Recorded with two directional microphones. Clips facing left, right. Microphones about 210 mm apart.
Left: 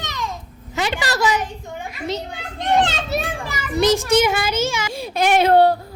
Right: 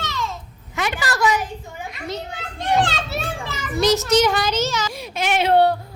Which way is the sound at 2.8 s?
20° left (ahead or behind).